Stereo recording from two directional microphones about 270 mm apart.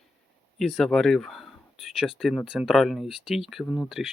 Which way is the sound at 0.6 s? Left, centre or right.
Centre.